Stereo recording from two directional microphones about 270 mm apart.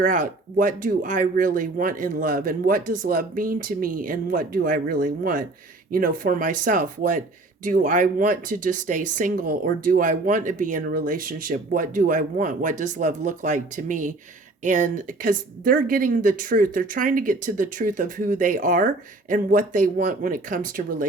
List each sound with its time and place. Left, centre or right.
0.0 s speech: right